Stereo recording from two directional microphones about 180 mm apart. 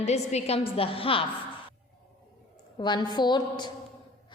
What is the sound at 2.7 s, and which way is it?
Speech, 25° left (ahead or behind).